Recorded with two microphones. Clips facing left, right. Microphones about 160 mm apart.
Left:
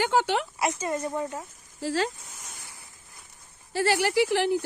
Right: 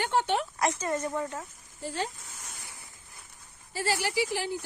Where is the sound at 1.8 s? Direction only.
90° left.